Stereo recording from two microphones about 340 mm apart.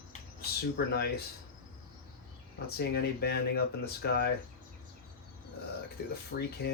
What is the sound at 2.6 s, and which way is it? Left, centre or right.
Speech, left.